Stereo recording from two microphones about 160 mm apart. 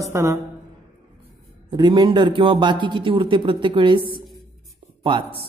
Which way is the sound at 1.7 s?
30° right (ahead or behind).